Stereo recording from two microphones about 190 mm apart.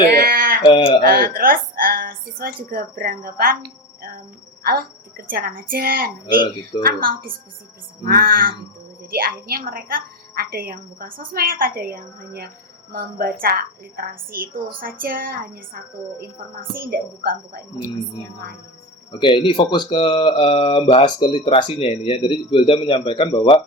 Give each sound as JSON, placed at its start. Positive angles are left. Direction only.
{"t": 0.2, "sound": "a sound", "side_deg": -50}
{"t": 0.6, "sound": "speech", "side_deg": 25}
{"t": 1.2, "sound": "a woman's voice", "side_deg": -50}
{"t": 4.6, "sound": "a woman's voice", "side_deg": -55}
{"t": 19.1, "sound": "speech", "side_deg": 25}